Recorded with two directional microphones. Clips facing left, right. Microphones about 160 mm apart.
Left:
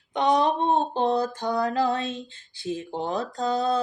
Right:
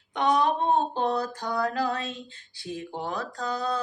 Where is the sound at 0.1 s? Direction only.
20° left (ahead or behind).